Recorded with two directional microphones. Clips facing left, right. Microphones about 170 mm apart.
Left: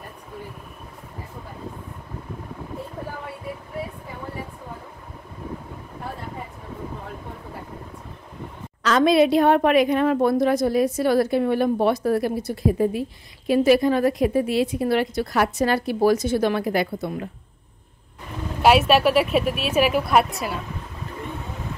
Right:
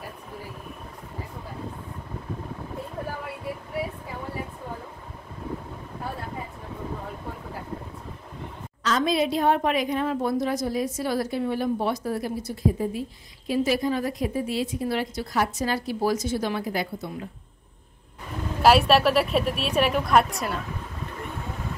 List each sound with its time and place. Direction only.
8.8 s a woman's voice: 70° left (ahead or behind)
18.6 s a woman's voice: centre (ahead or behind)